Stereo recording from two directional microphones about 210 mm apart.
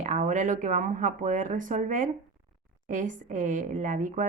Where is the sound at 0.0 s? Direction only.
35° right (ahead or behind).